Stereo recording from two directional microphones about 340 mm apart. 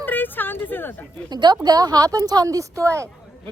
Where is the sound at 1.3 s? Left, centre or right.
Centre.